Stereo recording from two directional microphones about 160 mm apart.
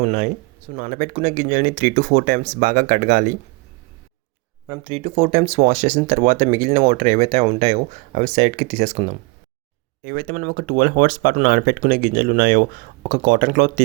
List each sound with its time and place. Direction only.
0.0 s speech: 50° right (ahead or behind)
4.6 s speech: 30° right (ahead or behind)
10.0 s speech: 65° right (ahead or behind)